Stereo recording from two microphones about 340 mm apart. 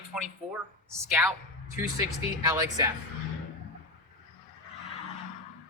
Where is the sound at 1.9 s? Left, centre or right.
Centre.